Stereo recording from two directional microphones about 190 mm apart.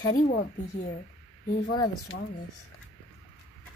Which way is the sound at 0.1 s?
45° left (ahead or behind).